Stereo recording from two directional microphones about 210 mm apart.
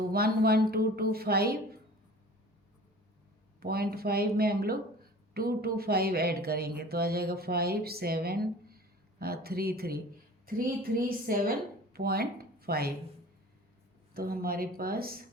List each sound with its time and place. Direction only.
0.1 s a woman's voice: 45° right (ahead or behind)
3.6 s a woman's voice: 45° right (ahead or behind)
14.1 s a woman's voice: 45° right (ahead or behind)